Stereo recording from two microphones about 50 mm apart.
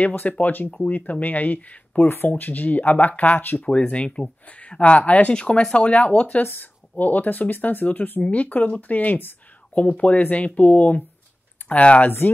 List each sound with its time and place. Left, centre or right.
0.1 s speech: left
2.0 s speech: left
3.6 s speech: left
5.3 s speech: centre
6.4 s speech: left